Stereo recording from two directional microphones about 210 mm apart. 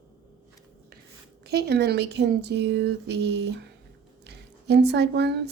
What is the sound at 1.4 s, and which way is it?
Speech, 50° right (ahead or behind).